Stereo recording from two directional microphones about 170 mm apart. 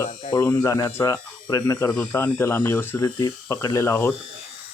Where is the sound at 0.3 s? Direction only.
15° left (ahead or behind).